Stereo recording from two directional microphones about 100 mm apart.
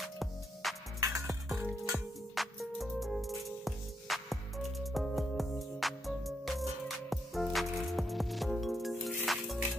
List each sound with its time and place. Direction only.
0.2 s music: centre (ahead or behind)
1.0 s music: 30° right (ahead or behind)
1.9 s music: centre (ahead or behind)